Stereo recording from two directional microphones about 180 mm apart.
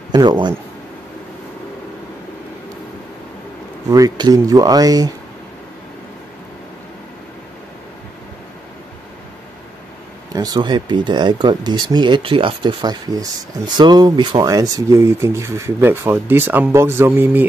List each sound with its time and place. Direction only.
0.1 s speech: 25° right (ahead or behind)
3.9 s speech: 20° right (ahead or behind)
10.3 s speech: 20° right (ahead or behind)